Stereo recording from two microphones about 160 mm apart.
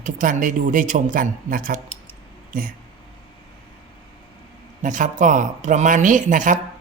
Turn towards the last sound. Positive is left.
turn(degrees=-55)  # may be behind; listen again after turning